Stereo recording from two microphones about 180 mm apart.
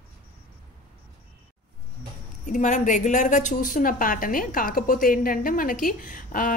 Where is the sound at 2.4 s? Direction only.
45° left (ahead or behind).